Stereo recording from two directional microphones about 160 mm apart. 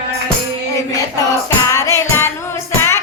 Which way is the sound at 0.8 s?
20° left (ahead or behind).